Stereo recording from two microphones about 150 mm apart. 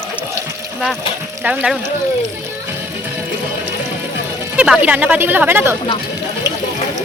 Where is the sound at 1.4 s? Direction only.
10° right (ahead or behind).